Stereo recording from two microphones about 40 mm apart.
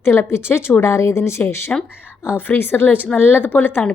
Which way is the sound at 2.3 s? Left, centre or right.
Left.